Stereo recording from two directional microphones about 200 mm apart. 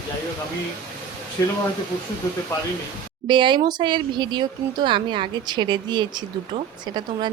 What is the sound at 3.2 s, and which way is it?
Speech, 25° right (ahead or behind).